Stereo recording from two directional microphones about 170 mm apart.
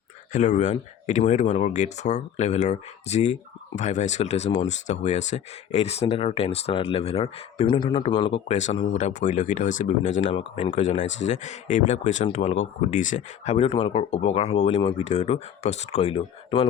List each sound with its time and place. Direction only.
0.3 s speech: 45° left (ahead or behind)
10.3 s speech: 30° left (ahead or behind)
10.8 s speech: 45° left (ahead or behind)